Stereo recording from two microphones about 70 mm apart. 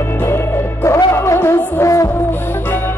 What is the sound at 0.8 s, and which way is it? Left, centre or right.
Music, left.